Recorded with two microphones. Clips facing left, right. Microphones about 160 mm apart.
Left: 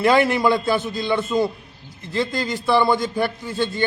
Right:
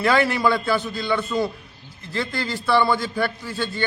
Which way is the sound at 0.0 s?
20° left (ahead or behind).